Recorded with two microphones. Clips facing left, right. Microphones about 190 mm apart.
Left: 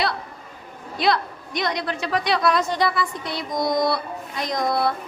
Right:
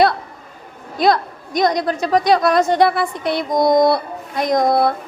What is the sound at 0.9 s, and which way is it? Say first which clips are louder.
A woman's voice: right 6 dB; 45° right (ahead or behind).